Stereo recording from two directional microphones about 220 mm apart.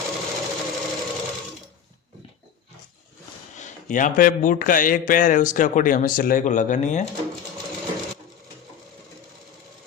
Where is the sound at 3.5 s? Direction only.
35° left (ahead or behind).